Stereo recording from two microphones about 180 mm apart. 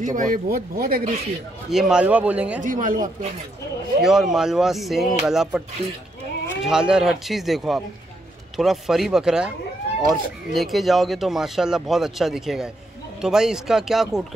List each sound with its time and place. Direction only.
0.0 s speech: 45° right (ahead or behind)
1.7 s speech: 5° right (ahead or behind)
2.6 s speech: 50° right (ahead or behind)
4.0 s speech: centre (ahead or behind)
6.6 s speech: 5° right (ahead or behind)